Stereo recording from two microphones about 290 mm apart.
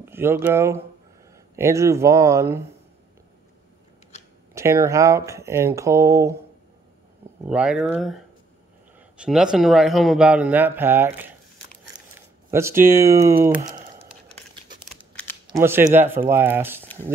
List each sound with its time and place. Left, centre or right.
0.0 s speech: centre
4.6 s speech: centre
7.4 s a man's voice: centre
12.4 s speech: centre
13.6 s a sound: right
15.4 s speech: centre